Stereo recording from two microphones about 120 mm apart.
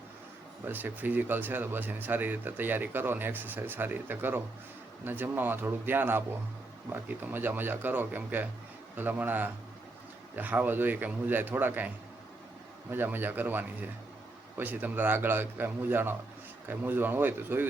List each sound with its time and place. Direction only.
0.6 s speech: 15° right (ahead or behind)
12.9 s speech: 15° right (ahead or behind)